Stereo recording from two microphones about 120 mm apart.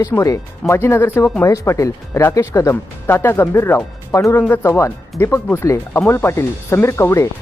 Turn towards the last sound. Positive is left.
turn(degrees=20)  # may be behind; listen again after turning